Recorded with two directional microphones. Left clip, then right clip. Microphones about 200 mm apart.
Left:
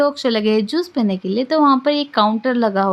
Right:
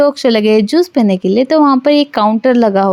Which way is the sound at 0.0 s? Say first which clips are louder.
Right 6 dB; 30° right (ahead or behind).